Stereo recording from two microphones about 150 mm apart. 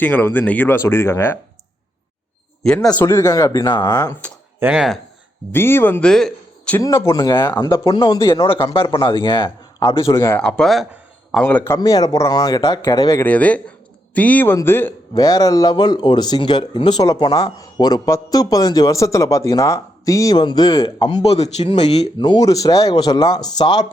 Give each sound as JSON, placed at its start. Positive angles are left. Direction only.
{"t": 0.0, "sound": "speech", "side_deg": 15}
{"t": 2.8, "sound": "speech", "side_deg": 15}
{"t": 4.6, "sound": "speech", "side_deg": -5}
{"t": 5.5, "sound": "speech", "side_deg": 15}
{"t": 6.7, "sound": "speech", "side_deg": 20}
{"t": 7.6, "sound": "speech", "side_deg": 30}
{"t": 10.1, "sound": "speech", "side_deg": 20}
{"t": 10.4, "sound": "speech", "side_deg": 5}
{"t": 13.2, "sound": "a man's voice", "side_deg": 10}
{"t": 15.1, "sound": "speech", "side_deg": 25}
{"t": 21.2, "sound": "speech", "side_deg": 45}
{"t": 22.2, "sound": "speech", "side_deg": 25}